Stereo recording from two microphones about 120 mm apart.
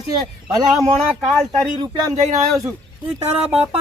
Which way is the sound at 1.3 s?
5° left (ahead or behind).